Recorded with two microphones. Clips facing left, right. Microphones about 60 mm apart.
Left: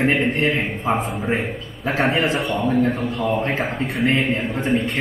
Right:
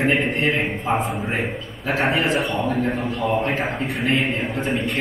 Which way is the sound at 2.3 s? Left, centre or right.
Centre.